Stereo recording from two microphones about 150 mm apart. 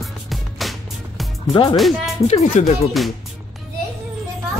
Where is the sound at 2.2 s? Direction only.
45° left (ahead or behind).